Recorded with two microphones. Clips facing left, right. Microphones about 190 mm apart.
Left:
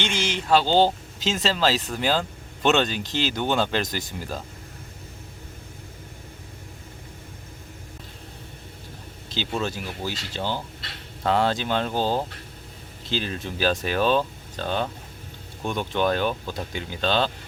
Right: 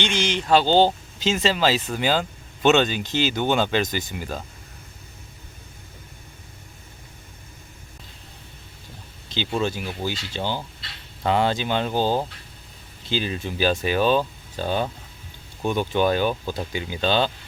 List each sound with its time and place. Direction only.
0.0 s speech: 5° left (ahead or behind)
9.3 s speech: centre (ahead or behind)